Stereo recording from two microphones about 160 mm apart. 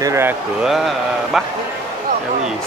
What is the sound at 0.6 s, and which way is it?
Speech, centre (ahead or behind).